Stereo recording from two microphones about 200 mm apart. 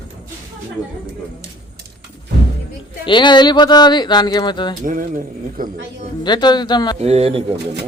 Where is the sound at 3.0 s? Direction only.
25° left (ahead or behind).